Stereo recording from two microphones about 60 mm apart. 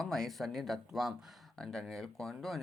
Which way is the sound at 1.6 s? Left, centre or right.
Centre.